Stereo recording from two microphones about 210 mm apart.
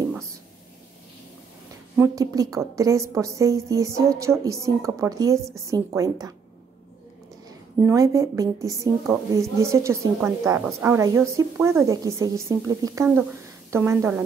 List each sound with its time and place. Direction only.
2.0 s a woman's voice: 15° right (ahead or behind)
7.4 s a woman's voice: 15° right (ahead or behind)